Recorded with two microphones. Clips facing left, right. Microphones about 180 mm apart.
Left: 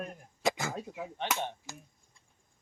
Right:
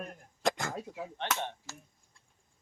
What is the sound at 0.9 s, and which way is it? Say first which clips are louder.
Speech: left 1 dB; 15° left (ahead or behind).